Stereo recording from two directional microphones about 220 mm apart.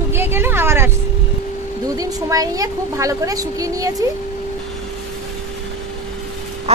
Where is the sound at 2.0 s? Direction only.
15° right (ahead or behind).